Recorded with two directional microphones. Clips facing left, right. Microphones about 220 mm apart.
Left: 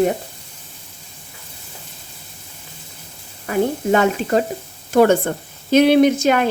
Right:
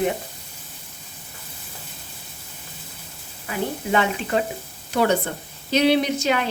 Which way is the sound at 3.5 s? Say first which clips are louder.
Left 7 dB; 45° left (ahead or behind).